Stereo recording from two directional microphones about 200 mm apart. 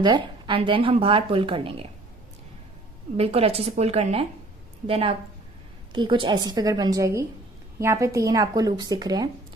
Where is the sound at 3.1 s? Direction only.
30° right (ahead or behind).